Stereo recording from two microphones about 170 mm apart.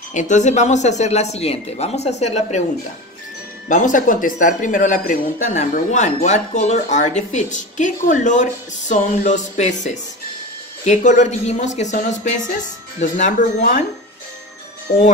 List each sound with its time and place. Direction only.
0.1 s speech: 45° left (ahead or behind)
3.6 s speech: 50° left (ahead or behind)
14.9 s speech: 45° left (ahead or behind)